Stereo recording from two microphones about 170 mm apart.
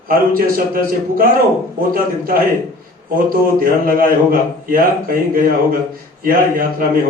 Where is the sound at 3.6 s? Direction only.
55° right (ahead or behind).